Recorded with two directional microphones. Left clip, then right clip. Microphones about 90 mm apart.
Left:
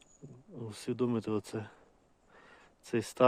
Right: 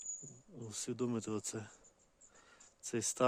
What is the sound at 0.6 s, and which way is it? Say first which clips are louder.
Speech: left 6 dB; 25° right (ahead or behind).